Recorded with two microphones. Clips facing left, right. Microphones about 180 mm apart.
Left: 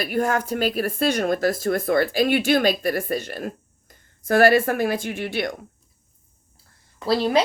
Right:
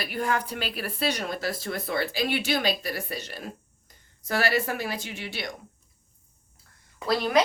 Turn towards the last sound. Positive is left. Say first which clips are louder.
# left 4 dB
turn(degrees=30)  # may be behind; listen again after turning